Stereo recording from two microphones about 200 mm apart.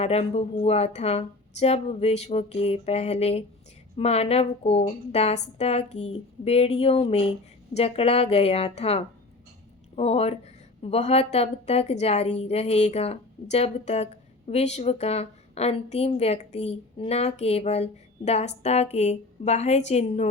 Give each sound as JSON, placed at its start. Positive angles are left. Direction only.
{"t": 0.0, "sound": "a woman's voice", "side_deg": 30}